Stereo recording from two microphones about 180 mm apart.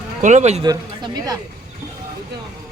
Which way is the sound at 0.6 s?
20° right (ahead or behind).